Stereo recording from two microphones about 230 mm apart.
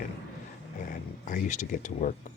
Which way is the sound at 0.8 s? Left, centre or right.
Left.